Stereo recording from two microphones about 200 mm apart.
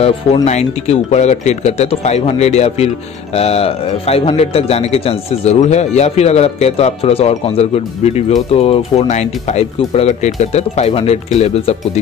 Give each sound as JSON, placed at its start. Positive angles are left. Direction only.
{"t": 0.0, "sound": "a man's voice", "side_deg": 35}